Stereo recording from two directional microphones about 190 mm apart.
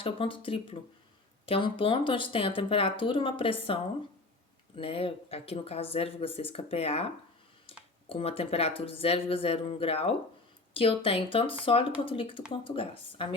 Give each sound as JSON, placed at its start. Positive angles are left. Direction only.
{"t": 0.0, "sound": "speech", "side_deg": 30}
{"t": 4.8, "sound": "speech", "side_deg": 30}
{"t": 8.1, "sound": "speech", "side_deg": 30}